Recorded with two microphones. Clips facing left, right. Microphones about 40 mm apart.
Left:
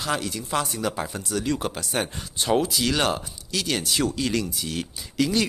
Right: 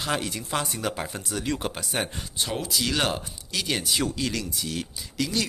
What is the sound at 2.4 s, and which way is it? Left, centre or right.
Speech, centre.